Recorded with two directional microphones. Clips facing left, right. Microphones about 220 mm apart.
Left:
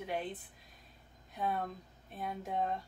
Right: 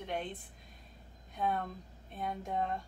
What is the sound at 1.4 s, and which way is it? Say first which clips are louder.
Speech: right 1 dB; 5° left (ahead or behind).